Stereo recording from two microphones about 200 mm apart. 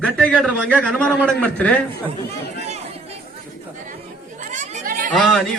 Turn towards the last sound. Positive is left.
turn(degrees=0)  # may be behind; listen again after turning